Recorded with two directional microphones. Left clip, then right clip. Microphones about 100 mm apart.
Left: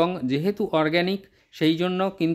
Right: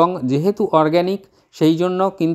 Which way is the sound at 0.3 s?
30° right (ahead or behind).